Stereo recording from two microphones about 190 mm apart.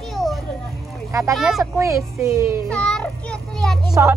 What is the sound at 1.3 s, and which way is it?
Speech, centre (ahead or behind).